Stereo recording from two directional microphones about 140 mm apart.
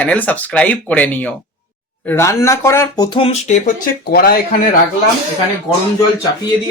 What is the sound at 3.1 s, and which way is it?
Speech, 40° left (ahead or behind).